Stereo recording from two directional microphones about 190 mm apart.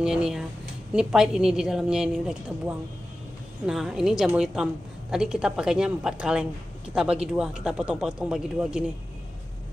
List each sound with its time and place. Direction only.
0.0 s speech: 5° right (ahead or behind)
3.6 s speech: centre (ahead or behind)